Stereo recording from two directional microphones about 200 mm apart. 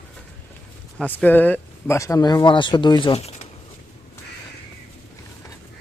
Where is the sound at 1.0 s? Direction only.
5° left (ahead or behind); by 3.3 s 25° left (ahead or behind).